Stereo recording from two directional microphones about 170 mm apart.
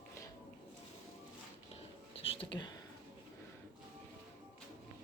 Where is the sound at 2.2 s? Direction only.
35° left (ahead or behind).